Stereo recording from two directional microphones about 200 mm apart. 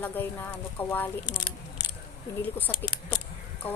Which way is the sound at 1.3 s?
20° left (ahead or behind).